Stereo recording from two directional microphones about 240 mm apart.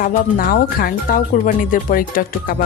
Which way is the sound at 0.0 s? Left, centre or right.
Left.